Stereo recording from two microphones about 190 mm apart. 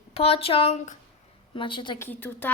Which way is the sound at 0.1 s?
30° left (ahead or behind).